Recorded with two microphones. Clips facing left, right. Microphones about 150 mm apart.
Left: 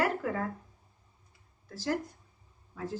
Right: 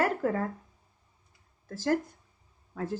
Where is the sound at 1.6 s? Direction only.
50° right (ahead or behind).